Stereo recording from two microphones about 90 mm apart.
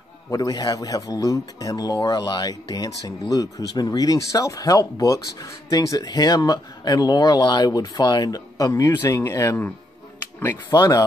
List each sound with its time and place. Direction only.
0.3 s a man's voice: 45° left (ahead or behind)
10.7 s a man's voice: 45° left (ahead or behind)